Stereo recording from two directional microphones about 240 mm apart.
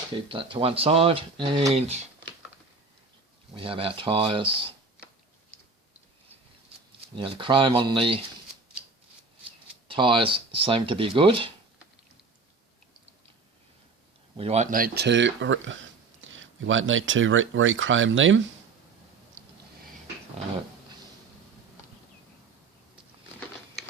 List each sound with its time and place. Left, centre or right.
0.5 s speech: right
3.5 s speech: right
7.2 s speech: right
9.9 s speech: right
14.3 s speech: right